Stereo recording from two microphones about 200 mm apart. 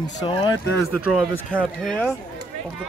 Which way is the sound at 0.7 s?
Centre (ahead or behind).